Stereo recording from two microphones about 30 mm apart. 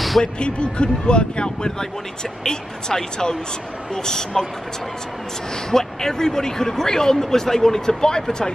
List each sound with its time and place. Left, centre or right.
0.2 s speech: left
2.4 s speech: centre
5.7 s speech: centre
8.0 s speech: left